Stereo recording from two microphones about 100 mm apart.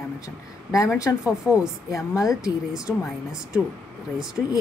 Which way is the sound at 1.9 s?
30° left (ahead or behind).